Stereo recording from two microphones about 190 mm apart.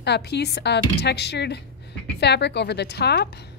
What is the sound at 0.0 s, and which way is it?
A woman's voice, 60° left (ahead or behind).